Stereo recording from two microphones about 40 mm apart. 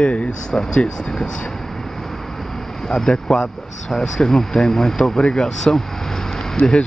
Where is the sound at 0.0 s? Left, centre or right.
Left.